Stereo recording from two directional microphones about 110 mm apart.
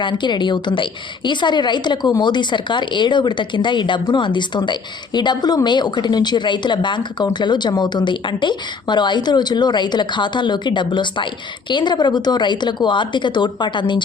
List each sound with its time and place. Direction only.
0.0 s speech: 45° left (ahead or behind)